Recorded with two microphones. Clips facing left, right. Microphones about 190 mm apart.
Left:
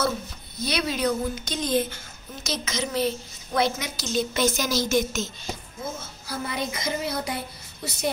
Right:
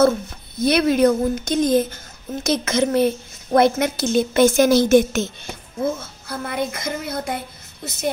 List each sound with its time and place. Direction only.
0.0 s speech: 50° right (ahead or behind)
2.4 s a woman's voice: 55° right (ahead or behind)